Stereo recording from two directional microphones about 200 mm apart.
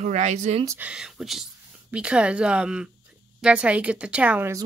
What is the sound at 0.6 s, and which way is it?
A woman's voice, 5° right (ahead or behind).